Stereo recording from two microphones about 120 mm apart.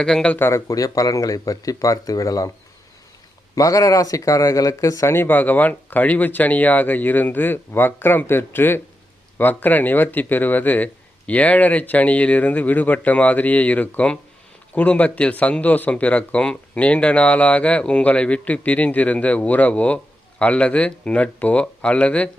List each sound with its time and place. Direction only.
0.0 s speech: 5° left (ahead or behind)
0.3 s speech: 20° left (ahead or behind)
3.5 s speech: 30° left (ahead or behind); by 22.3 s 10° left (ahead or behind)